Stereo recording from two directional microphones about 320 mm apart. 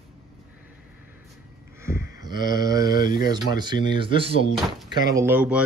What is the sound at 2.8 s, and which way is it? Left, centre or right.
Speech, left.